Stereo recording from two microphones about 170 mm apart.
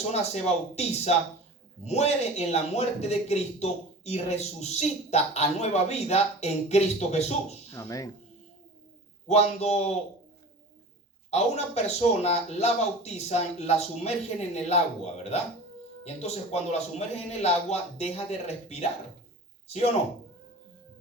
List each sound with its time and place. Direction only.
0.0 s a man's voice: 40° left (ahead or behind)
7.7 s speech: 20° left (ahead or behind)
9.2 s a man's voice: 40° left (ahead or behind)
11.3 s a man's voice: 40° left (ahead or behind)
16.0 s a man's voice: 40° left (ahead or behind)